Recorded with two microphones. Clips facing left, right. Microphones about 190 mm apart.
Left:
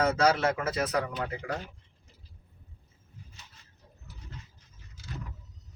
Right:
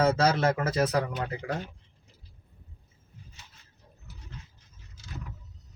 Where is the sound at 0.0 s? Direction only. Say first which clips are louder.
Right 1 dB; 30° right (ahead or behind).